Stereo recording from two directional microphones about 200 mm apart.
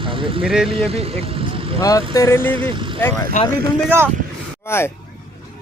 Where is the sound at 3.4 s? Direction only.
40° left (ahead or behind).